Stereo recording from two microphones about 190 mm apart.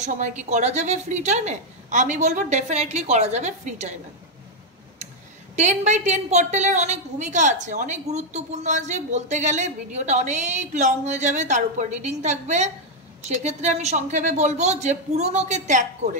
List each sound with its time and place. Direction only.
0.0 s a woman's voice: 40° right (ahead or behind)
5.6 s a woman's voice: 40° right (ahead or behind)